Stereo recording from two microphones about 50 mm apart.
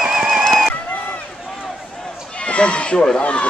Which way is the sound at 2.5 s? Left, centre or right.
Left.